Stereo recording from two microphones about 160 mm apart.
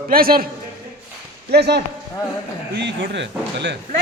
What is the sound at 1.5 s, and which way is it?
Speech, 90° right.